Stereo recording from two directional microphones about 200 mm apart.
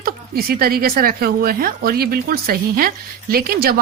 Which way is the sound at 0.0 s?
50° right (ahead or behind).